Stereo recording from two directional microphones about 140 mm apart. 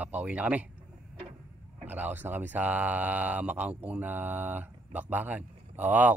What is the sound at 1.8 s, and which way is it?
Speech, 15° right (ahead or behind).